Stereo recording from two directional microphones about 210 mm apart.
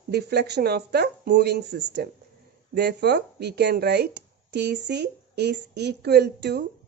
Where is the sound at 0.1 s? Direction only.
50° right (ahead or behind).